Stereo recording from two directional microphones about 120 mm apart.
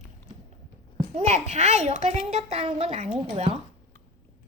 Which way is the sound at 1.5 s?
70° right (ahead or behind).